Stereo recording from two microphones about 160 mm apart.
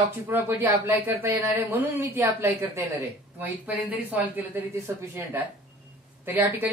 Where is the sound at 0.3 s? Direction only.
10° right (ahead or behind).